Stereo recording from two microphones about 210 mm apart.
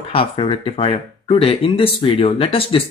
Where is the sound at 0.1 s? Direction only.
25° left (ahead or behind).